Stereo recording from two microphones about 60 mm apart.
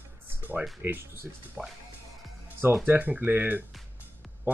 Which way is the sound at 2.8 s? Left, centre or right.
Right.